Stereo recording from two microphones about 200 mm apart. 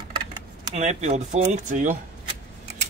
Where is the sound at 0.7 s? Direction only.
35° right (ahead or behind).